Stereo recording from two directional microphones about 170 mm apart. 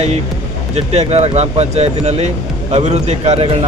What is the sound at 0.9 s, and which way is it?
A man's voice, 40° right (ahead or behind).